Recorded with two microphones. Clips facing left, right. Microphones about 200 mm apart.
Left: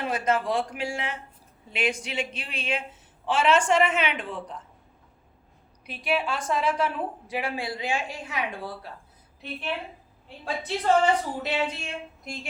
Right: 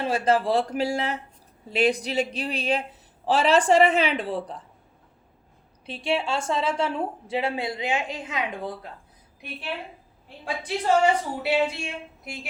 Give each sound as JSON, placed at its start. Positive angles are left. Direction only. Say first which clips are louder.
{"t": 0.0, "sound": "a woman's voice", "louder": "right 3 dB", "side_deg": -30}
{"t": 5.8, "sound": "a woman's voice", "louder": "right 1 dB", "side_deg": -25}
{"t": 10.4, "sound": "a woman's voice", "louder": "even", "side_deg": -10}